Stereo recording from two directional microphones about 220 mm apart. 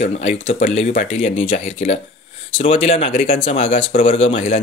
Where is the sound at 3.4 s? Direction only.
25° left (ahead or behind).